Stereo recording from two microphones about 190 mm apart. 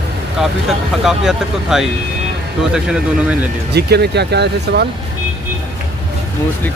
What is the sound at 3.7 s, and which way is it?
Speech, 60° right (ahead or behind).